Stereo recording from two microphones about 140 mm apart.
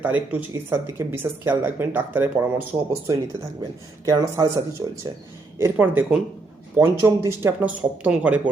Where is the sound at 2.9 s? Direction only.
25° right (ahead or behind).